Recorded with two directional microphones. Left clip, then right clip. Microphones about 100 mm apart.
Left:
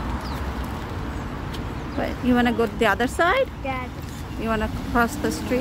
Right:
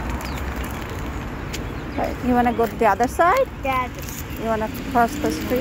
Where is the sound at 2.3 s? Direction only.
40° left (ahead or behind).